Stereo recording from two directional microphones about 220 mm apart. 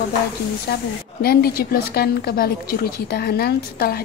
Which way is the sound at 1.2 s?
45° left (ahead or behind).